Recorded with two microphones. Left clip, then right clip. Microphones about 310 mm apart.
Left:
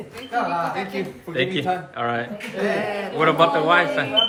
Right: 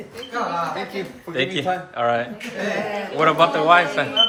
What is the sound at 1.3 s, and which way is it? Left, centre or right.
Speech, centre.